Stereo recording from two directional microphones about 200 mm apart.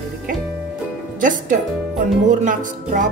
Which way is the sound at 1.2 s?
40° right (ahead or behind).